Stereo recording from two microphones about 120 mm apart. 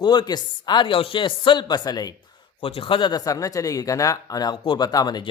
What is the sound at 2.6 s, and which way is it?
A man's voice, 50° left (ahead or behind).